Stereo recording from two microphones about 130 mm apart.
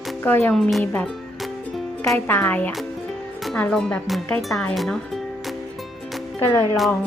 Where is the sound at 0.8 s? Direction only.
15° left (ahead or behind).